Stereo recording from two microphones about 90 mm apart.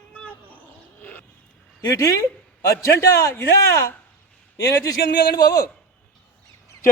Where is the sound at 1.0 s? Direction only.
15° left (ahead or behind).